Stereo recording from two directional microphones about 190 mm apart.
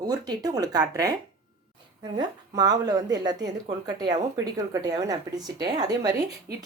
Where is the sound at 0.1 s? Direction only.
20° right (ahead or behind).